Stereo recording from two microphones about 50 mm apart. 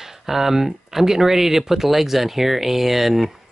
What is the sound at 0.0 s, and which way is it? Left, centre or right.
Speech, centre.